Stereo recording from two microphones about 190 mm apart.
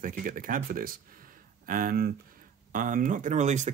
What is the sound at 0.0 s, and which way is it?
Speech, 45° right (ahead or behind).